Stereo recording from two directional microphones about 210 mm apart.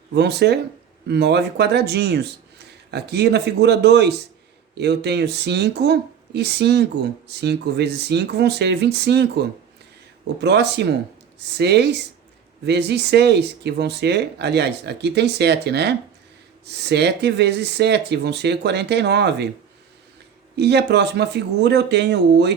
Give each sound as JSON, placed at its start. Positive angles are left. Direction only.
{"t": 0.1, "sound": "speech", "side_deg": -50}
{"t": 10.4, "sound": "speech", "side_deg": -55}
{"t": 20.6, "sound": "speech", "side_deg": -55}